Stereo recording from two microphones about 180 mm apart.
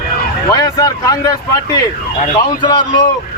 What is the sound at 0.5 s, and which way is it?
A man's voice, 20° left (ahead or behind).